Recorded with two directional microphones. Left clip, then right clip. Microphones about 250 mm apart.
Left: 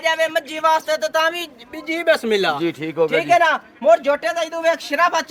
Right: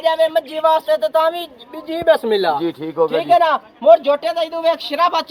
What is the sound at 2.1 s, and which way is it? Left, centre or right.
A man's voice, left.